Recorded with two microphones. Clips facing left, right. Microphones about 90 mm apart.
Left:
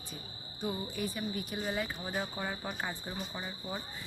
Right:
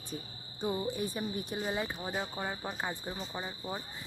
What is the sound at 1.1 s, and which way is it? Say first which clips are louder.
Speech: right 1 dB; 20° right (ahead or behind).